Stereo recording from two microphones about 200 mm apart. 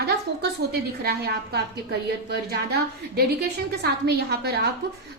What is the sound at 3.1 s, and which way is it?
A woman's voice, 55° right (ahead or behind).